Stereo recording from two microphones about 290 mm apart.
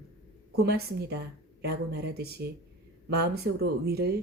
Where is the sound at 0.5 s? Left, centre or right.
Right.